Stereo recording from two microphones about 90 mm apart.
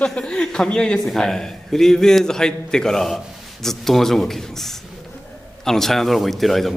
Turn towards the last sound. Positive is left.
turn(degrees=0)  # may be behind; listen again after turning